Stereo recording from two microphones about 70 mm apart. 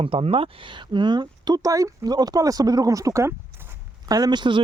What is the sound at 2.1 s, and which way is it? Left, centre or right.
Speech, right.